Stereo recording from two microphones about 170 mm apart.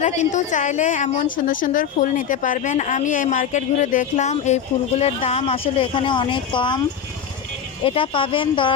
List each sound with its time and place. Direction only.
0.0 s a woman's voice: 45° left (ahead or behind); by 6.8 s 30° left (ahead or behind)
7.9 s speech: 30° left (ahead or behind)